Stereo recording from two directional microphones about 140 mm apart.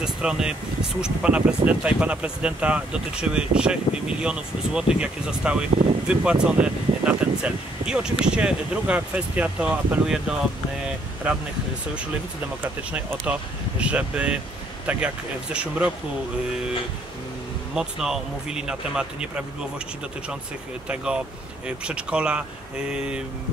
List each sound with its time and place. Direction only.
0.0 s speech: 5° right (ahead or behind)
12.9 s speech: 15° right (ahead or behind)
17.7 s speech: 5° right (ahead or behind)
20.9 s speech: 5° right (ahead or behind)